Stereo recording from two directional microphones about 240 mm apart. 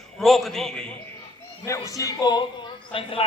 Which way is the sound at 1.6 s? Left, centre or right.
Centre.